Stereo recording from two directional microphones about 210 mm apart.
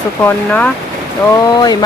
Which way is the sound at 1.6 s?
20° left (ahead or behind).